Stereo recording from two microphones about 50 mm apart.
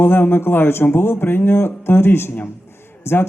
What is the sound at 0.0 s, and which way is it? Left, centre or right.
Speech, left.